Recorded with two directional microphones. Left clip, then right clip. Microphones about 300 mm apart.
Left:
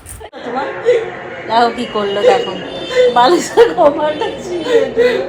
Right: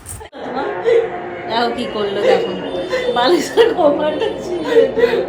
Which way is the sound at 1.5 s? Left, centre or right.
Centre.